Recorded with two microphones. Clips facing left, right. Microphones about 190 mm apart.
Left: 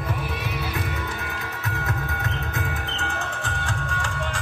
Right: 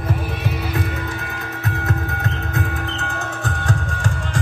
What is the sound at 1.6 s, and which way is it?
Music, 45° right (ahead or behind).